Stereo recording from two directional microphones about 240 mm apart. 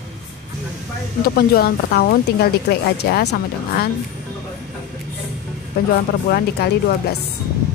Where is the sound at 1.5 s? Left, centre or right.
Left.